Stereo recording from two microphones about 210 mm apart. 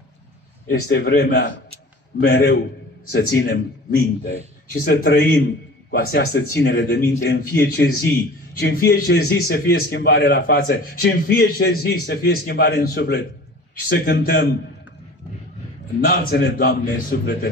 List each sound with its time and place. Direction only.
0.7 s a man's voice: 55° left (ahead or behind)
16.0 s a man's voice: 50° left (ahead or behind)